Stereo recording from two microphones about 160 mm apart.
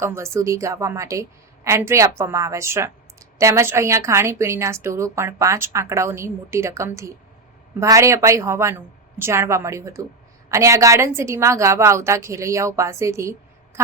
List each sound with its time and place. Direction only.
0.0 s a woman's voice: 15° right (ahead or behind)